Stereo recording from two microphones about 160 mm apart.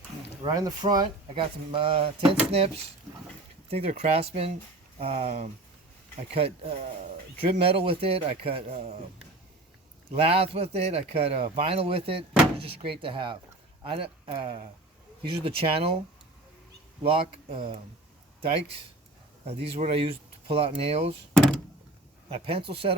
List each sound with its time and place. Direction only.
0.4 s speech: 25° right (ahead or behind)
10.2 s speech: 40° right (ahead or behind)
17.0 s speech: 35° right (ahead or behind)
19.5 s speech: 40° right (ahead or behind)
21.3 s door: 5° left (ahead or behind)
22.3 s speech: 35° right (ahead or behind)